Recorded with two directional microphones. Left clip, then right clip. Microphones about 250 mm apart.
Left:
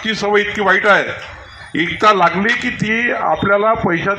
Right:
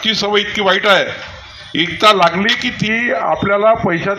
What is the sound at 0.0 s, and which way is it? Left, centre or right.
A man's voice, right.